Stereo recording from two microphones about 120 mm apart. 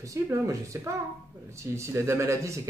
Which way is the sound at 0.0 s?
25° right (ahead or behind).